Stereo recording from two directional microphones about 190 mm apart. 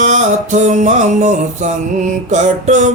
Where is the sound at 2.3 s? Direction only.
40° right (ahead or behind).